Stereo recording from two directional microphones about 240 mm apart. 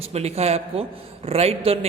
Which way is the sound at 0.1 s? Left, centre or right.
Right.